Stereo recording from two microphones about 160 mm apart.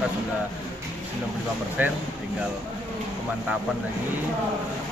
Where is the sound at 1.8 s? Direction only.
10° right (ahead or behind).